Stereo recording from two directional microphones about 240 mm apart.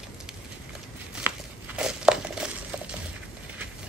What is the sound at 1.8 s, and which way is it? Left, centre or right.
Crumpling, centre.